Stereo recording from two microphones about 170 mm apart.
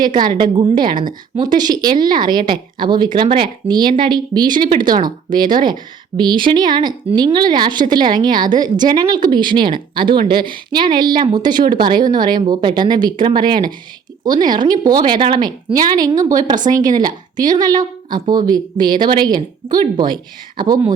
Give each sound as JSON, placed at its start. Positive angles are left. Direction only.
{"t": 0.2, "sound": "speech", "side_deg": -25}
{"t": 20.6, "sound": "speech", "side_deg": -25}